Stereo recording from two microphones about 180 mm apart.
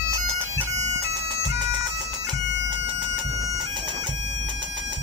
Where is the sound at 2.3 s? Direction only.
25° right (ahead or behind).